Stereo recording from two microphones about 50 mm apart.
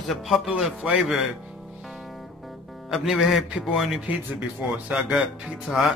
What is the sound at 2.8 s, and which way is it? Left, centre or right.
Speech, centre.